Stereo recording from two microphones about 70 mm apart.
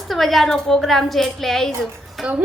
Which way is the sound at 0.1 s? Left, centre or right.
Centre.